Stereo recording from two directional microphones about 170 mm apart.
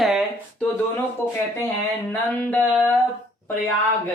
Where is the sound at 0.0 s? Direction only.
Centre (ahead or behind).